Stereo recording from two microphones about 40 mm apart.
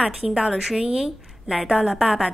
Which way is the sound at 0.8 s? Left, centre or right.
Centre.